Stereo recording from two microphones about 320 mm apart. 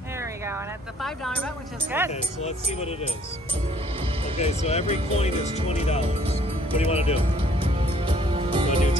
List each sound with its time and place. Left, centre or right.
1.0 s speech: centre
4.4 s speech: centre
7.2 s music: centre